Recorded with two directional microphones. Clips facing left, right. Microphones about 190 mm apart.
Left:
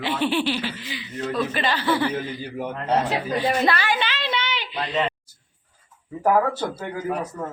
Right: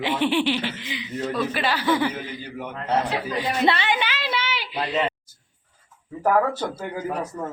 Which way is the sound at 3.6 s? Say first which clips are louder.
Right 1 dB; 25° right (ahead or behind).